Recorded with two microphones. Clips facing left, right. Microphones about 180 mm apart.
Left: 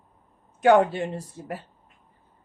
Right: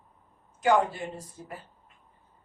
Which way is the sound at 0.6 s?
65° left (ahead or behind).